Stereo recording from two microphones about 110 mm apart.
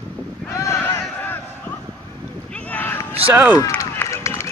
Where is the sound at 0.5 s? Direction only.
25° left (ahead or behind).